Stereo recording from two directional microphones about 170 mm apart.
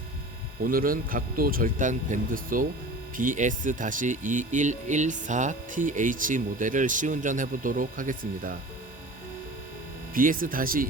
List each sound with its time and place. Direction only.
0.6 s speech: 55° right (ahead or behind)
10.2 s speech: 55° right (ahead or behind)